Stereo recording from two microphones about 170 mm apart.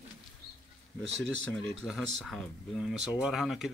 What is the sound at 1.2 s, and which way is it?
Speech, 90° right.